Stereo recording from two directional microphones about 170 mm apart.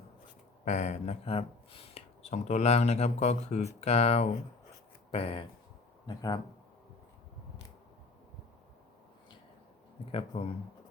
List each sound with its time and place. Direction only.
0.6 s speech: 45° left (ahead or behind); by 6.4 s 25° left (ahead or behind)
10.1 s speech: 35° left (ahead or behind)